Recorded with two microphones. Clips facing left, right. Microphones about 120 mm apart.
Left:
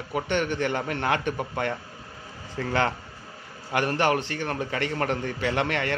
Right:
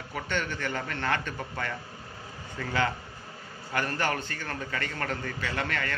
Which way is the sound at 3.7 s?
65° left (ahead or behind).